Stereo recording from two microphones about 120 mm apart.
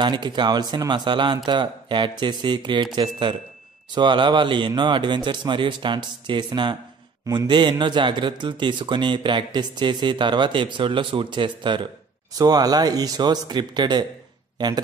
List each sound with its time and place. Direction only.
0.0 s speech: 40° right (ahead or behind)